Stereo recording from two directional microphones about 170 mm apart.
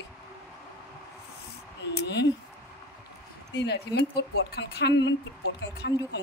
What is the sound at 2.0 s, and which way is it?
Speech, 90° left.